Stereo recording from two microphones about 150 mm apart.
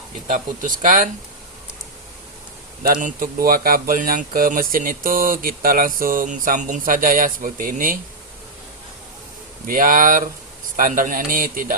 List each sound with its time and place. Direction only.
0.3 s speech: 60° right (ahead or behind)
2.8 s speech: 70° right (ahead or behind)
9.6 s speech: 65° right (ahead or behind)